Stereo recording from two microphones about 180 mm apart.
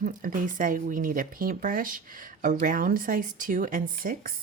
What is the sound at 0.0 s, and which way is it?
Speech, 50° right (ahead or behind).